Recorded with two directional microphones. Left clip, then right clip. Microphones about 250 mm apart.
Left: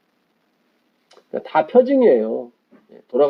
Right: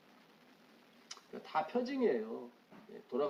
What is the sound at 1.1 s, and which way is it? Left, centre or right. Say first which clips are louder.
Speech: left 18 dB; right.